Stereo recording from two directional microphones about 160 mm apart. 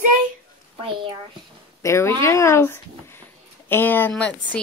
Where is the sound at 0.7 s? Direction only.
35° right (ahead or behind).